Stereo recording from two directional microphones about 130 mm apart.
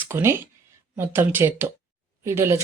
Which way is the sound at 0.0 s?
20° right (ahead or behind).